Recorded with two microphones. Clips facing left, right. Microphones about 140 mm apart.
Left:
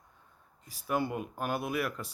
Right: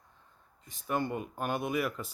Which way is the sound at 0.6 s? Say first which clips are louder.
Left 1 dB; 5° left (ahead or behind).